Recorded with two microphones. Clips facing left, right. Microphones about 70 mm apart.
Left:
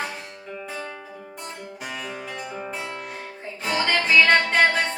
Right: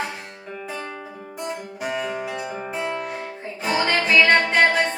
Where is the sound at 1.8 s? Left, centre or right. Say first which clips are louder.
Right 8 dB; centre.